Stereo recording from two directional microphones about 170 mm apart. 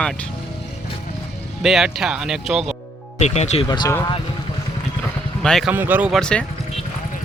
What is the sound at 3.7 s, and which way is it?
Speech, 25° left (ahead or behind).